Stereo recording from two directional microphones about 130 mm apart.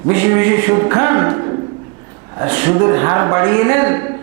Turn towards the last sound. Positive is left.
turn(degrees=-20)  # may be behind; listen again after turning